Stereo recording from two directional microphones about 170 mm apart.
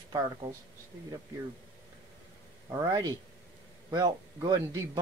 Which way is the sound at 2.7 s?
20° right (ahead or behind).